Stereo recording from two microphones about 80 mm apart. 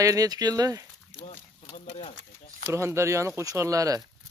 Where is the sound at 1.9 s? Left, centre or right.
Left.